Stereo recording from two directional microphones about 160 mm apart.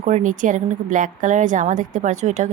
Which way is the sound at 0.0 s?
50° right (ahead or behind).